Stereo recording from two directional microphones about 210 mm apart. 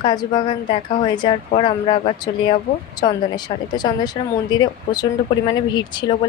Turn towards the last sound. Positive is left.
turn(degrees=20)  # may be behind; listen again after turning